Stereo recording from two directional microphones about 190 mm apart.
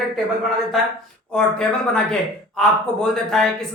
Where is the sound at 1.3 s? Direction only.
5° left (ahead or behind).